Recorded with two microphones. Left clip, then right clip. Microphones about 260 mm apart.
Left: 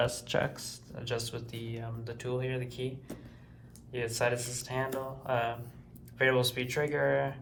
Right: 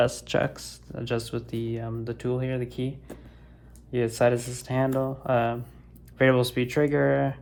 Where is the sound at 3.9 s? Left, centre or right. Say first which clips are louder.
Right 8 dB; right.